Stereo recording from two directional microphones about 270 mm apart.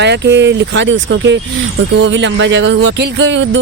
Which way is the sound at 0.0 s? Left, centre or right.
Right.